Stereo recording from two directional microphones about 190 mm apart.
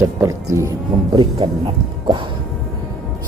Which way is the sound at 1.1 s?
25° right (ahead or behind).